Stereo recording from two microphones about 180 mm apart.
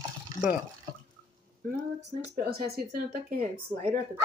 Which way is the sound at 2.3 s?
60° right (ahead or behind).